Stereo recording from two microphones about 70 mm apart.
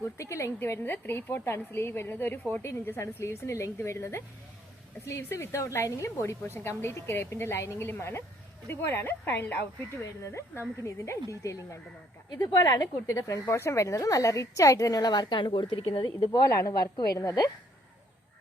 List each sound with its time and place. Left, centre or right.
0.2 s a woman's voice: left
3.0 s a woman's voice: left
10.0 s a woman's voice: left
12.4 s a woman's voice: left
15.1 s speech: left
16.5 s a woman's voice: left